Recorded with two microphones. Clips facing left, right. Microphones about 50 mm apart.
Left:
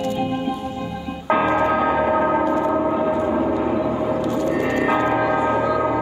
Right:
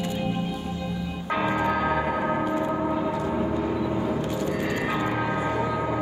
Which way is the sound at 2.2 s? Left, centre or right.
Left.